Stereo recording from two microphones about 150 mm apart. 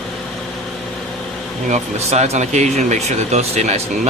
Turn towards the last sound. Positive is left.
turn(degrees=-45)  # may be behind; listen again after turning